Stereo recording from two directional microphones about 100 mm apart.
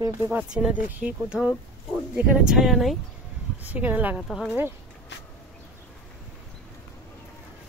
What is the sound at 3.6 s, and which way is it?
Speech, 15° right (ahead or behind).